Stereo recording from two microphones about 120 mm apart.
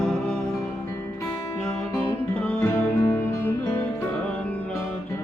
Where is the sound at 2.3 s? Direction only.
10° left (ahead or behind).